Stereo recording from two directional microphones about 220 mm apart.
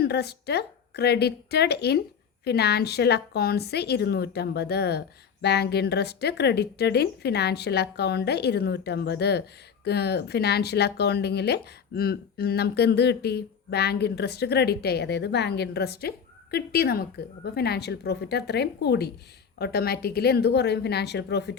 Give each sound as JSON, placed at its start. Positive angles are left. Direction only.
{"t": 0.0, "sound": "speech", "side_deg": 45}